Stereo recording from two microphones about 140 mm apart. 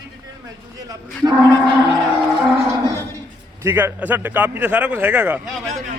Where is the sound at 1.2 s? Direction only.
30° right (ahead or behind).